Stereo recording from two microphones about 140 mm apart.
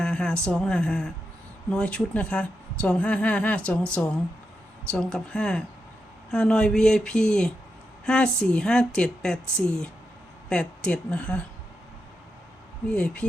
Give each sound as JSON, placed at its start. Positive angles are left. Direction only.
{"t": 0.0, "sound": "a sound", "side_deg": 5}
{"t": 0.4, "sound": "a woman's voice", "side_deg": 5}
{"t": 12.9, "sound": "a woman's voice", "side_deg": 10}